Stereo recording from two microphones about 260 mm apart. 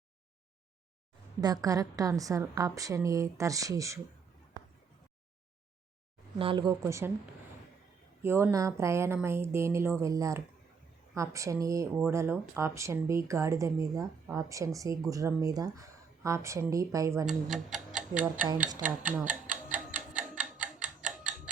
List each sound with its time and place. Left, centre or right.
1.4 s speech: centre
6.4 s speech: centre
8.2 s speech: centre
17.5 s tick-tock: centre
18.8 s speech: right
19.7 s tick-tock: centre
20.8 s tick-tock: right